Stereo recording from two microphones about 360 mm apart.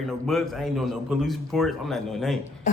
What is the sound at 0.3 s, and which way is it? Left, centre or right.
A man's voice, centre.